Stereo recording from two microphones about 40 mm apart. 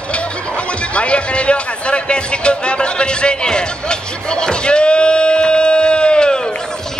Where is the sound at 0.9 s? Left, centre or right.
Left.